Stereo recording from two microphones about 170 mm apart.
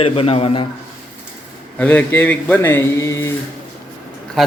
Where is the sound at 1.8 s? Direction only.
10° left (ahead or behind).